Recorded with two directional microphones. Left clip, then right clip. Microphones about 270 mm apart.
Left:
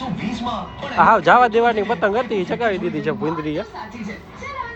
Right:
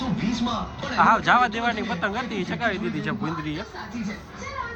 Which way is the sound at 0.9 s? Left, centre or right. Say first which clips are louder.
Left 6 dB; centre.